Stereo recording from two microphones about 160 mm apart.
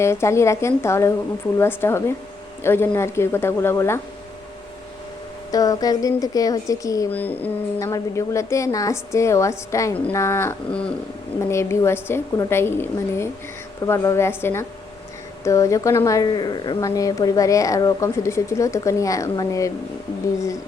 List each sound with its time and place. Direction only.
0.0 s a woman's voice: 15° left (ahead or behind)
5.5 s speech: 25° left (ahead or behind)
7.1 s a woman's voice: 10° left (ahead or behind)